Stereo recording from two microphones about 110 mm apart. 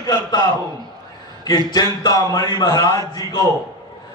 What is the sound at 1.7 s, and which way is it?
A man's voice, 40° left (ahead or behind).